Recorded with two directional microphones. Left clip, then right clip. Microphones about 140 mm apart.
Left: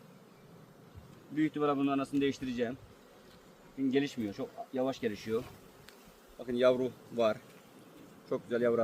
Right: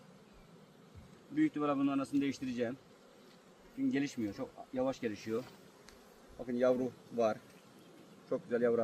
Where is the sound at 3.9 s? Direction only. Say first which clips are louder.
Left 6 dB; 15° left (ahead or behind).